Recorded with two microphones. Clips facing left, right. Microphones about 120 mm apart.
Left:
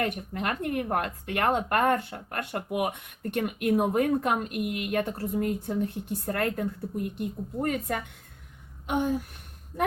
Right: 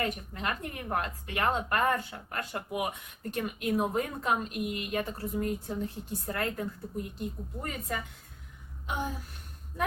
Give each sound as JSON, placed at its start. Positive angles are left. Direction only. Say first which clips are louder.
{"t": 0.0, "sound": "speech", "louder": "left 3 dB", "side_deg": 60}